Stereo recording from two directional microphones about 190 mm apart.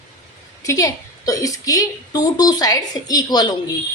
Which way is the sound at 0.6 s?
15° left (ahead or behind).